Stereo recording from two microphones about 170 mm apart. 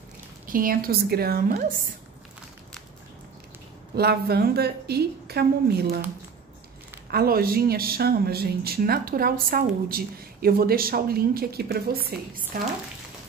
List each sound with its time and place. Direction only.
0.5 s speech: 55° right (ahead or behind)
3.9 s a woman's voice: 70° right (ahead or behind)
7.1 s speech: 60° right (ahead or behind)
12.5 s speech: 55° right (ahead or behind)